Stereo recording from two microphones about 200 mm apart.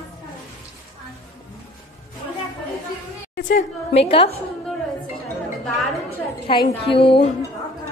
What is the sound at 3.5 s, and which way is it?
Speech, 30° left (ahead or behind).